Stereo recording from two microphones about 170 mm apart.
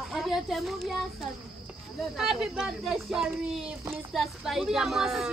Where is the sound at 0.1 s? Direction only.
Centre (ahead or behind).